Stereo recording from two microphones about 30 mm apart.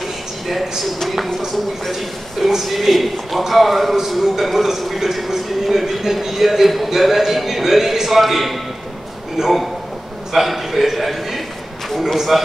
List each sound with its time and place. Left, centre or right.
0.0 s a sound: centre
1.5 s a man's voice: centre
9.4 s a man's voice: centre
10.3 s a man's voice: centre